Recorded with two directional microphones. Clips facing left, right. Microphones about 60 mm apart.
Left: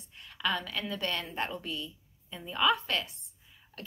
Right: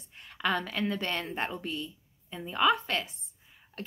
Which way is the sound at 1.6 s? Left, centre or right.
Right.